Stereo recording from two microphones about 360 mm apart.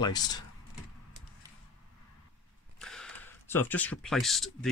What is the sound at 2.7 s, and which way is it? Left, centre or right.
Speech, centre.